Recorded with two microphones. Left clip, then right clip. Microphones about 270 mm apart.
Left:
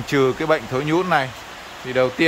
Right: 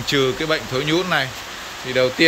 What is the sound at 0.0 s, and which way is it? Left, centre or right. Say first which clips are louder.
Speech: even; centre.